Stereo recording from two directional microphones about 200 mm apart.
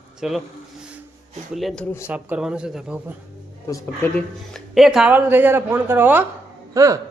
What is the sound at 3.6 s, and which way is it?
Speech, 15° left (ahead or behind).